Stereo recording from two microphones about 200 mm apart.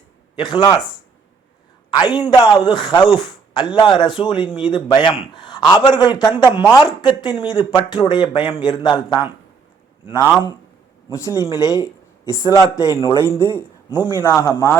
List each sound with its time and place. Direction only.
0.3 s a man's voice: 25° left (ahead or behind)
1.9 s a man's voice: 25° left (ahead or behind)